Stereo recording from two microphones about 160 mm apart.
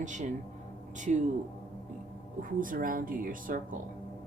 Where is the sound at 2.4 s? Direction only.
60° right (ahead or behind).